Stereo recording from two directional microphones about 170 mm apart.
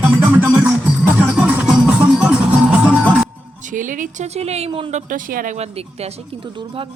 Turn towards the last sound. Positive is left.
turn(degrees=-55)  # may be behind; listen again after turning